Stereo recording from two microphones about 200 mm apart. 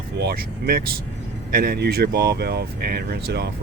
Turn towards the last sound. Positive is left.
turn(degrees=-55)  # may be behind; listen again after turning